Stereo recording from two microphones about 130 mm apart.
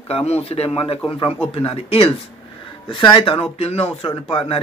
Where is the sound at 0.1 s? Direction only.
50° left (ahead or behind).